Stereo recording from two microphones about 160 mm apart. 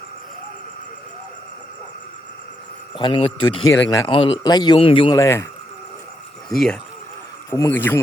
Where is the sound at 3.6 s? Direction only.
20° left (ahead or behind).